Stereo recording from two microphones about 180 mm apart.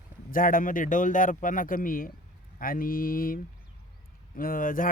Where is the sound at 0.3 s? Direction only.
50° left (ahead or behind).